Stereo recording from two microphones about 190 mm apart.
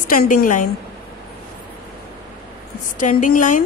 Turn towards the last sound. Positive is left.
turn(degrees=45)  # may be behind; listen again after turning